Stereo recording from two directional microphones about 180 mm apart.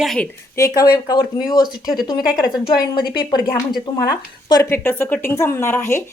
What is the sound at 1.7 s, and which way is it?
Speech, centre (ahead or behind).